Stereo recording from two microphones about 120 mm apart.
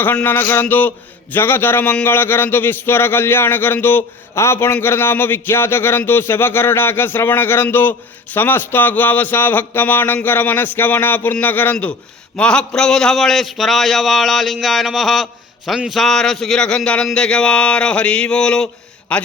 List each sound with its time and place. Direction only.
0.0 s a man's voice: 15° left (ahead or behind)